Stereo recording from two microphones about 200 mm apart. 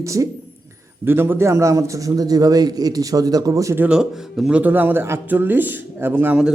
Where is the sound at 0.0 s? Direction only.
15° right (ahead or behind).